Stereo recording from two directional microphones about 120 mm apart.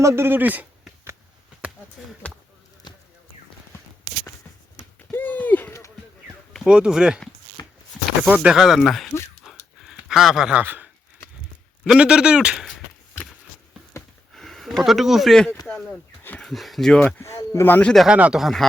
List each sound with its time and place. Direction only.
0.0 s a sound: 20° right (ahead or behind)
5.1 s a sound: 15° left (ahead or behind)
6.7 s speech: 5° right (ahead or behind)
7.6 s a sound: 30° left (ahead or behind)
8.2 s speech: 5° right (ahead or behind)
9.4 s dog: centre (ahead or behind)
11.9 s speech: 5° right (ahead or behind)
14.3 s speech: centre (ahead or behind)
15.6 s a sound: 10° left (ahead or behind)
16.4 s speech: centre (ahead or behind)
17.2 s speech: 25° left (ahead or behind)
18.0 s speech: 10° right (ahead or behind)